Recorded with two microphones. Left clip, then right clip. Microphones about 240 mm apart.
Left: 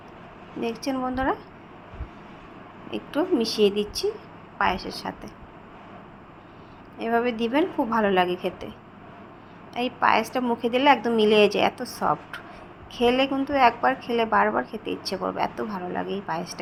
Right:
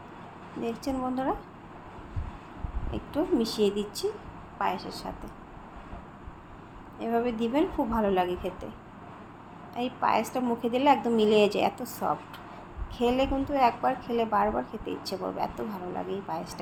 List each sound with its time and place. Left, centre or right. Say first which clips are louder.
0.6 s a woman's voice: left 4 dB; centre
2.9 s a woman's voice: left 4 dB; centre
7.0 s a woman's voice: left 4 dB; centre
9.7 s a woman's voice: left 5 dB; centre